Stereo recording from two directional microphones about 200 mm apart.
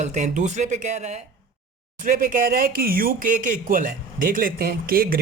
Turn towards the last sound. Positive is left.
turn(degrees=-45)  # may be behind; listen again after turning